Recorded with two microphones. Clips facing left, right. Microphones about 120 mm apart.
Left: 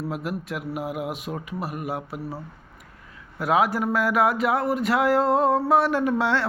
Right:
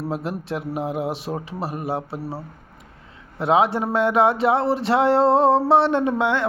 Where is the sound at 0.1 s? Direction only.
30° right (ahead or behind).